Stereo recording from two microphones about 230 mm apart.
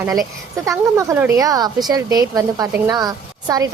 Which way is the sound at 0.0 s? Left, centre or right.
Centre.